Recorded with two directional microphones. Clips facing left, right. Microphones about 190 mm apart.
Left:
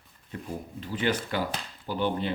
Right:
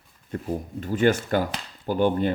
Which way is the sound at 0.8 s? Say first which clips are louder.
Right 7 dB; 45° right (ahead or behind).